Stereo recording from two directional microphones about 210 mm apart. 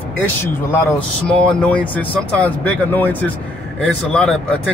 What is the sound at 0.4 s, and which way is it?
Speech, 10° left (ahead or behind).